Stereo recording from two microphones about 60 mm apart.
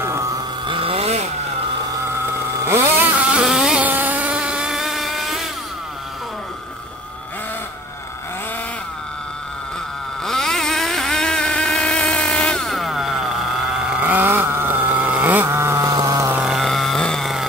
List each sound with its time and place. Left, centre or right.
0.0 s a sound: right
2.7 s vehicle: right
3.4 s vehicle: centre
3.8 s vehicle: right
4.7 s motorboat: centre
10.2 s vehicle: centre
12.6 s a sound: centre
13.7 s vehicle: centre
14.0 s vehicle: right
15.3 s vehicle: right
15.8 s vehicle: right
16.4 s music: centre
17.0 s a sound: centre